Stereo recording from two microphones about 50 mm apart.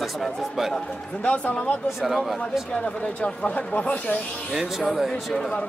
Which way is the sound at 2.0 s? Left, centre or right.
Centre.